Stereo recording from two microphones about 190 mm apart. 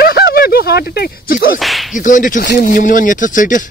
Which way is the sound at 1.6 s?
Centre (ahead or behind).